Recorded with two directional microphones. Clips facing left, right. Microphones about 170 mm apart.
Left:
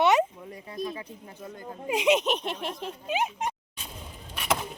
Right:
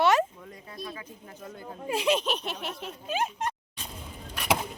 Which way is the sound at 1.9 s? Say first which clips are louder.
Left 3 dB; 20° left (ahead or behind).